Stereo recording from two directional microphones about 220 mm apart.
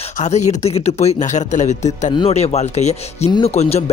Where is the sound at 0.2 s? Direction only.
30° left (ahead or behind).